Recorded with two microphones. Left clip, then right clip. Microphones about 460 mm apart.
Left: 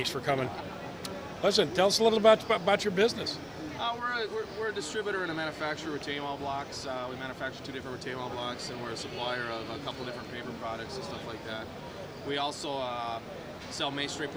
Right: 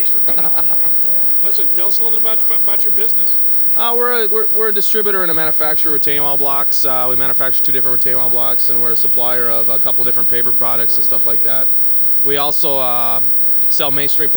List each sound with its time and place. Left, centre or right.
1.5 s speech: left
3.8 s speech: right